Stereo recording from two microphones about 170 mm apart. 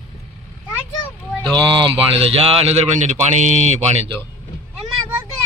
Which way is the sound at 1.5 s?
25° right (ahead or behind).